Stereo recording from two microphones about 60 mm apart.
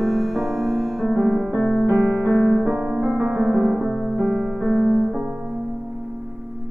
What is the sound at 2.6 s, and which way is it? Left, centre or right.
Piano, right.